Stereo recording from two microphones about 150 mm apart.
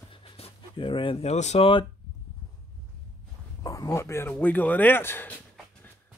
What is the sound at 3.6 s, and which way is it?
Speech, 25° left (ahead or behind).